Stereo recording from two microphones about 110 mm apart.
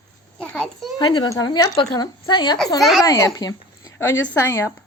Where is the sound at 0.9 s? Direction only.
45° left (ahead or behind).